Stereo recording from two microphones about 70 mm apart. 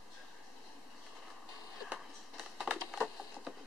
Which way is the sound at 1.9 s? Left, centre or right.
Centre.